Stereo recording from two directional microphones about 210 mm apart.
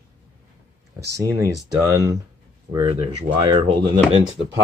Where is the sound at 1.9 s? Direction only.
15° right (ahead or behind).